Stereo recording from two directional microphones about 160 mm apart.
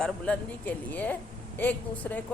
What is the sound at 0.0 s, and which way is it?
Speech, 10° left (ahead or behind).